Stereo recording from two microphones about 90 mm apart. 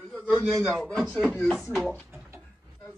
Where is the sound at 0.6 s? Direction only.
5° left (ahead or behind).